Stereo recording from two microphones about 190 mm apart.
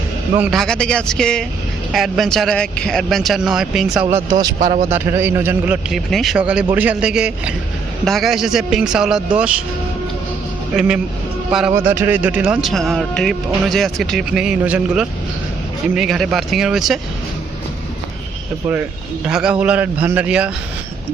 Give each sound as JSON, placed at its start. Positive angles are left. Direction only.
{"t": 0.3, "sound": "a man's voice", "side_deg": -10}
{"t": 0.6, "sound": "speech", "side_deg": 5}
{"t": 4.1, "sound": "a man's voice", "side_deg": -20}
{"t": 4.6, "sound": "a man's voice", "side_deg": -35}
{"t": 4.9, "sound": "a man's voice", "side_deg": -10}
{"t": 10.8, "sound": "speech", "side_deg": -5}
{"t": 19.3, "sound": "a man's voice", "side_deg": -5}